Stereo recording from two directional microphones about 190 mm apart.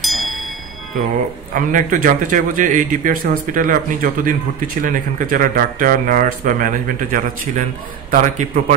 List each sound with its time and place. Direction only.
0.0 s music: centre (ahead or behind)
1.5 s a man's voice: 45° right (ahead or behind)